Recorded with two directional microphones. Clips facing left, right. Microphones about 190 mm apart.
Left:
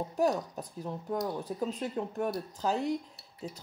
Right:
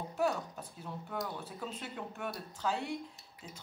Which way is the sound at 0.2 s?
40° left (ahead or behind).